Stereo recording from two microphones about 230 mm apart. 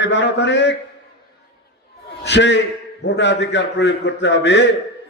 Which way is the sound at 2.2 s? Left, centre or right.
Left.